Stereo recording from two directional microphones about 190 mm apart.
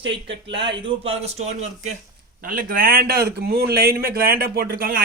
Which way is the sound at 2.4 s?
50° right (ahead or behind).